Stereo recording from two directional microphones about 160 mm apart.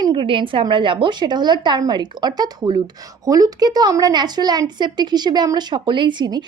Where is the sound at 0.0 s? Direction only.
30° right (ahead or behind).